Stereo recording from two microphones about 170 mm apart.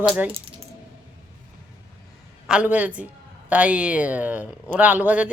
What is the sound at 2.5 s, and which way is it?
A man's voice, 5° right (ahead or behind).